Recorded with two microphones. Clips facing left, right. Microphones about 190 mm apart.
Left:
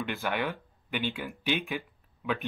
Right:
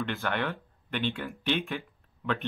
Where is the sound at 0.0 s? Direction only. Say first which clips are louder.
Even; 5° left (ahead or behind).